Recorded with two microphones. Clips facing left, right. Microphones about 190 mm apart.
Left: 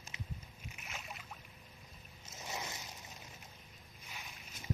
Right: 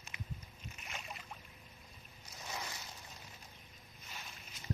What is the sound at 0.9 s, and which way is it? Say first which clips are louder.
Boat: right 1 dB; 5° left (ahead or behind).